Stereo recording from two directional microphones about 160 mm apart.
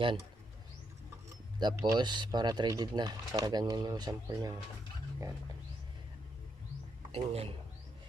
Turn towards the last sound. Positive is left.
turn(degrees=-35)  # may be behind; listen again after turning